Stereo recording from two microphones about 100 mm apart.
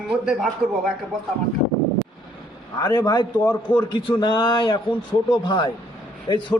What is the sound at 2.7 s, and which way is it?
A man's voice, 40° left (ahead or behind).